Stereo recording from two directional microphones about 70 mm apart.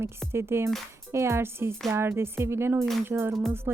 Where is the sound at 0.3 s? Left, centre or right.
Right.